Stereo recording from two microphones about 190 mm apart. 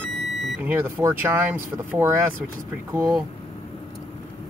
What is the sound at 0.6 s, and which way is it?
Speech, 10° right (ahead or behind).